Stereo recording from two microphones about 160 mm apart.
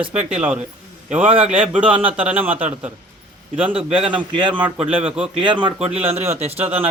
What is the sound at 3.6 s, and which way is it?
Speech, 35° right (ahead or behind).